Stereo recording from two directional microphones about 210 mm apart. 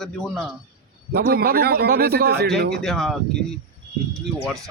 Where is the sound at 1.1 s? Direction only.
45° right (ahead or behind).